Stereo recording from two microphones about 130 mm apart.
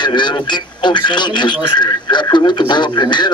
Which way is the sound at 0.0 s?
35° left (ahead or behind).